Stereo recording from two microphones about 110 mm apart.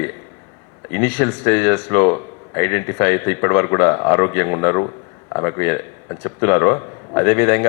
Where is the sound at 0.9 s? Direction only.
20° left (ahead or behind).